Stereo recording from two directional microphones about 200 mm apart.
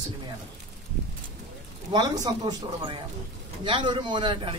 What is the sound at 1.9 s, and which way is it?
A man's voice, 20° right (ahead or behind).